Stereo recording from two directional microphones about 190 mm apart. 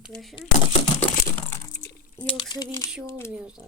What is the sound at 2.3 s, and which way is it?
Speech, 25° left (ahead or behind).